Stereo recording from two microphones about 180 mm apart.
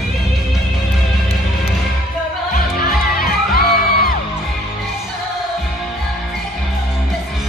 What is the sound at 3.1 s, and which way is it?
Music, 55° left (ahead or behind).